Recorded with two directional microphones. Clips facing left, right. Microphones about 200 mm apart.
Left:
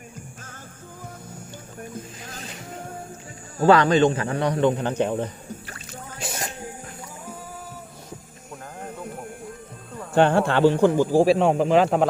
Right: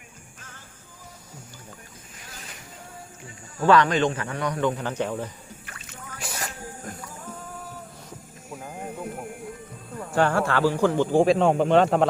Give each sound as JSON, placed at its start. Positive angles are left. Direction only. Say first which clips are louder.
{"t": 3.6, "sound": "a man's voice", "louder": "left 3 dB", "side_deg": 30}
{"t": 5.6, "sound": "boat", "louder": "left 4 dB", "side_deg": 30}
{"t": 8.8, "sound": "music", "louder": "right 1 dB", "side_deg": -5}
{"t": 10.2, "sound": "a man's voice", "louder": "left 4 dB", "side_deg": 25}
{"t": 10.9, "sound": "speech", "louder": "left 2 dB", "side_deg": 5}